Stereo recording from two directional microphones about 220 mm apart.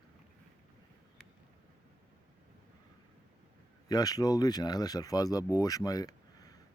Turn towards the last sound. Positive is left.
turn(degrees=15)  # may be behind; listen again after turning